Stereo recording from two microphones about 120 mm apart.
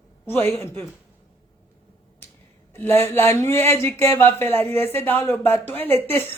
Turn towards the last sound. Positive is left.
turn(degrees=15)  # may be behind; listen again after turning